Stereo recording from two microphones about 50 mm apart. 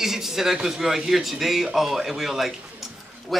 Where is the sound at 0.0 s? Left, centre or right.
Centre.